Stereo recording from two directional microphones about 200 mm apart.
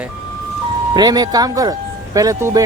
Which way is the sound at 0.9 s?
20° right (ahead or behind).